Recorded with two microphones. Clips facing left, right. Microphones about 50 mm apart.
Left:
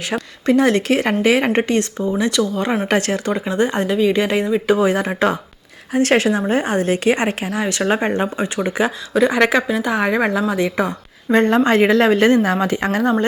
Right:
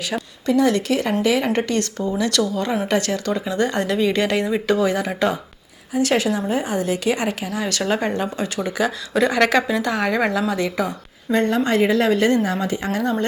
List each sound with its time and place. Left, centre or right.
0.1 s a woman's voice: left
2.8 s a woman's voice: left
10.8 s a woman's voice: left
12.5 s speech: left
13.0 s a woman's voice: left